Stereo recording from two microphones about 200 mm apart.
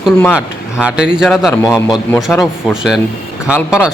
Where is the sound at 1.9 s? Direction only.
15° left (ahead or behind).